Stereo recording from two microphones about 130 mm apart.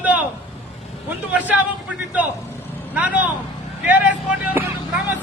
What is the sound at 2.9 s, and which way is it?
Speech, 10° right (ahead or behind).